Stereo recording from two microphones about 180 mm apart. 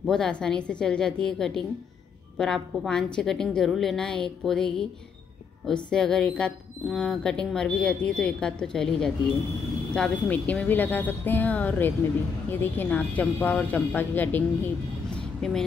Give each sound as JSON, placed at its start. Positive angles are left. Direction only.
{"t": 0.0, "sound": "speech", "side_deg": 5}
{"t": 5.9, "sound": "speech", "side_deg": 5}
{"t": 15.1, "sound": "vehicle", "side_deg": 5}